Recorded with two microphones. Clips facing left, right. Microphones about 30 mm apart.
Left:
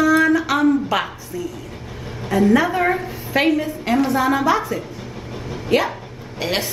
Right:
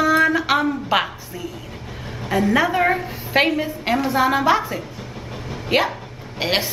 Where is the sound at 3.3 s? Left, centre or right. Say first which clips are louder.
Even; right.